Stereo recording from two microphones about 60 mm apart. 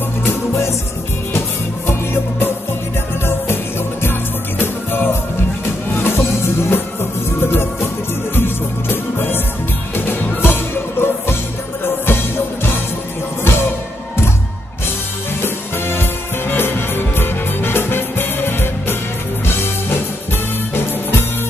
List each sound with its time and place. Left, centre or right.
0.3 s music: left
1.9 s music: left
4.0 s music: left
15.4 s music: left